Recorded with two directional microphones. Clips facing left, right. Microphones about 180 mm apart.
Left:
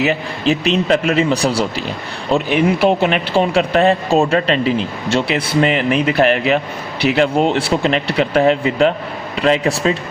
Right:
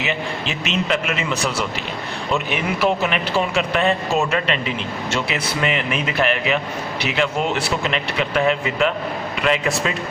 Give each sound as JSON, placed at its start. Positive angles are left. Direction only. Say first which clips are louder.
{"t": 0.0, "sound": "speech", "louder": "left 8 dB", "side_deg": 40}